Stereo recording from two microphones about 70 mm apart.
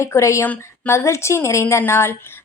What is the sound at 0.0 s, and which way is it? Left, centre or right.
A woman's voice, left.